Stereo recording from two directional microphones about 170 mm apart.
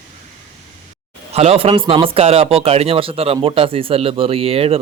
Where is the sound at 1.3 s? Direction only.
35° right (ahead or behind).